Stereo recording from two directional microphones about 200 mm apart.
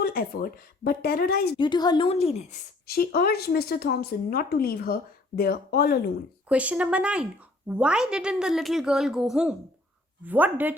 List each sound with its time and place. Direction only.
0.0 s a woman's voice: 45° left (ahead or behind)
1.5 s a woman's voice: 20° left (ahead or behind)
2.8 s a woman's voice: 50° left (ahead or behind)
6.5 s a woman's voice: 5° right (ahead or behind)